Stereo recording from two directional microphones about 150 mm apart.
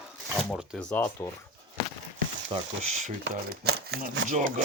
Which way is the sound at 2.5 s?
35° right (ahead or behind).